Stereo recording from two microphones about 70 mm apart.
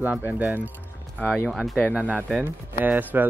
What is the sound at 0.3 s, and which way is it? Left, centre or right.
Speech, right.